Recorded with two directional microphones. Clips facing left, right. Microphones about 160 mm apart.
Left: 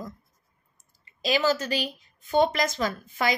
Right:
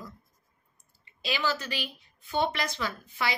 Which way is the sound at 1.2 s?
40° left (ahead or behind).